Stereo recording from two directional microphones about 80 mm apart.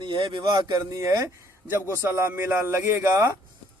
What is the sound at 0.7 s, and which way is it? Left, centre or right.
A man's voice, right.